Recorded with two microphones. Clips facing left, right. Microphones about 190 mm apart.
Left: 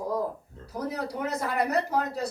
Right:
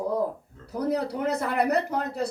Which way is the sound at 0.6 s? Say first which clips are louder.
Right 5 dB; 60° right (ahead or behind).